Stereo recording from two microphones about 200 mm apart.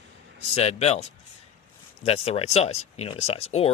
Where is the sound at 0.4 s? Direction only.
30° left (ahead or behind).